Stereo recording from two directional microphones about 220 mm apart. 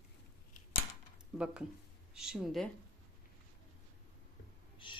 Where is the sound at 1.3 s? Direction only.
5° right (ahead or behind).